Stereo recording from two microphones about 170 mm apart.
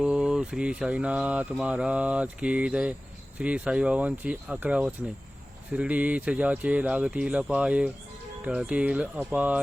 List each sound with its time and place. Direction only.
0.0 s speech: 5° right (ahead or behind)